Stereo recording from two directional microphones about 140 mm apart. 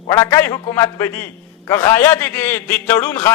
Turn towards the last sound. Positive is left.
turn(degrees=15)  # may be behind; listen again after turning